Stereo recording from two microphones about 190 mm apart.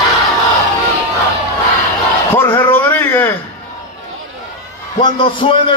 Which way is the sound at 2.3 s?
10° left (ahead or behind).